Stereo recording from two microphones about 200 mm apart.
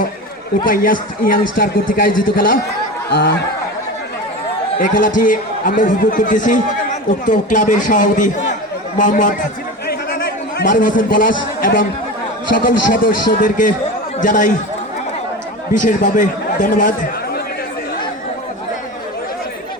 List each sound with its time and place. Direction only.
0.6 s a man's voice: 45° left (ahead or behind)
4.8 s a man's voice: 40° left (ahead or behind)
9.8 s a sound: 50° left (ahead or behind)
12.5 s a man's voice: 45° left (ahead or behind)
15.8 s speech: 40° left (ahead or behind)